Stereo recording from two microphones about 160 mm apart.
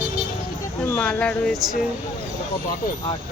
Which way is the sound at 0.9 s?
10° left (ahead or behind).